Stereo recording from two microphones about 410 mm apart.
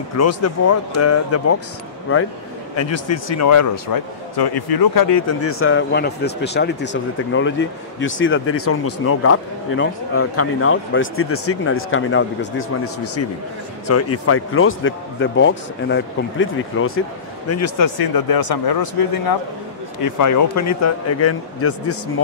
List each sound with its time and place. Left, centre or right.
0.2 s a man's voice: left
5.1 s speech: left
17.5 s speech: left
17.9 s speech: left
20.0 s speech: left